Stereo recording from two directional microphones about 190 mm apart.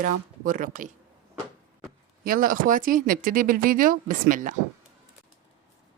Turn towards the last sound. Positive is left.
turn(degrees=-45)  # may be behind; listen again after turning